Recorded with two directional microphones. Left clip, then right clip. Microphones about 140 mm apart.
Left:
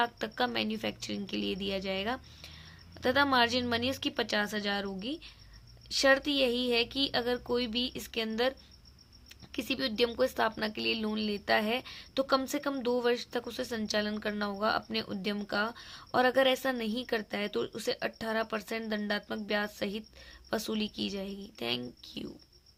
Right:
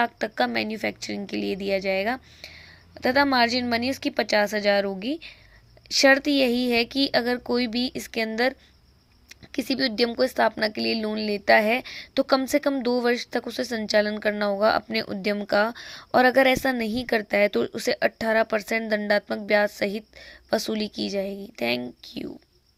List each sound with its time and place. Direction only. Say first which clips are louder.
0.0 s a woman's voice: right 7 dB; 40° right (ahead or behind)
9.5 s a woman's voice: right 8 dB; 40° right (ahead or behind)